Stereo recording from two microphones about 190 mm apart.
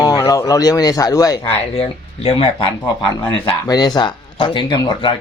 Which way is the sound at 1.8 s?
30° left (ahead or behind).